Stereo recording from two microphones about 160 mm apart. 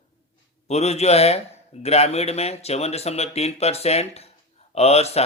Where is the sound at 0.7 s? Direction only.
40° left (ahead or behind).